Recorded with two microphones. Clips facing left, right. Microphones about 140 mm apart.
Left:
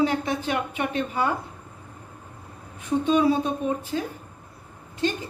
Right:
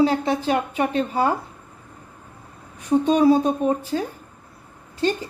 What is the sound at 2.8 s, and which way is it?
A woman's voice, 35° right (ahead or behind).